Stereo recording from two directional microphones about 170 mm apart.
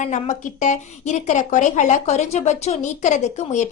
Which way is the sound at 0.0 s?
45° left (ahead or behind).